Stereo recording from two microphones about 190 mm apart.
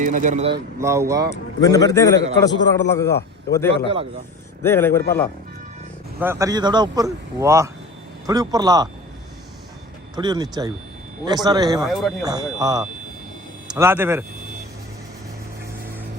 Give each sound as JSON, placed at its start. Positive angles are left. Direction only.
{"t": 0.0, "sound": "speech", "side_deg": -45}
{"t": 0.8, "sound": "speech", "side_deg": -15}
{"t": 1.6, "sound": "a man's voice", "side_deg": 20}
{"t": 6.1, "sound": "a man's voice", "side_deg": -15}
{"t": 10.2, "sound": "a man's voice", "side_deg": -20}
{"t": 11.8, "sound": "speech", "side_deg": 0}
{"t": 12.2, "sound": "speech", "side_deg": -20}